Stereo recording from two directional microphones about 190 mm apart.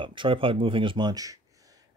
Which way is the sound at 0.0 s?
25° right (ahead or behind).